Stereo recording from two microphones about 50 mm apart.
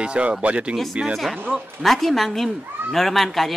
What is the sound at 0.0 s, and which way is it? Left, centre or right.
Speech, right.